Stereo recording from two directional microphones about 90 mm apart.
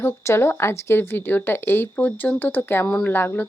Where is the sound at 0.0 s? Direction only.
30° left (ahead or behind).